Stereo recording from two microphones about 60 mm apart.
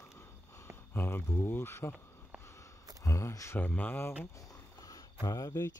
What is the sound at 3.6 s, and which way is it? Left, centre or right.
Speech, left.